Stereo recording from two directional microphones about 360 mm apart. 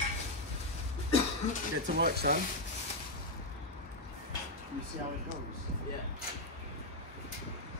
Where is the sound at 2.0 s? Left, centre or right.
Right.